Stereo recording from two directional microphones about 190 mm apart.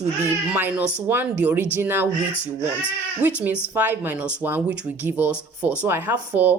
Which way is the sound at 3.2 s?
10° right (ahead or behind).